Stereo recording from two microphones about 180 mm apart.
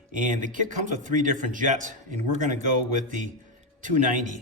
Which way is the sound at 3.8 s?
45° right (ahead or behind).